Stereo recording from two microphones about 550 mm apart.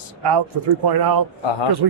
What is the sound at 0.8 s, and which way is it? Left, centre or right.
Speech, right.